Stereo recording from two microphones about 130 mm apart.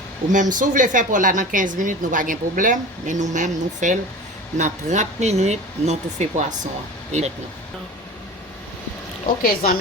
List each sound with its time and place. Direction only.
0.3 s speech: 80° right; by 6.7 s 65° right (ahead or behind)
9.2 s a woman's voice: 90° left